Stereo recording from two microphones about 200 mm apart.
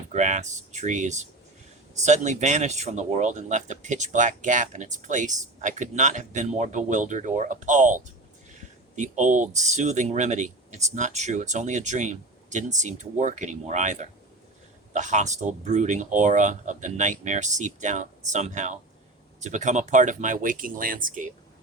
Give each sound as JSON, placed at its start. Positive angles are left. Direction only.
{"t": 0.1, "sound": "speech", "side_deg": -35}